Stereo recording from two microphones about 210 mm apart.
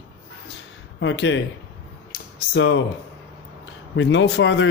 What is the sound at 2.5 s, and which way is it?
Speech, 60° left (ahead or behind).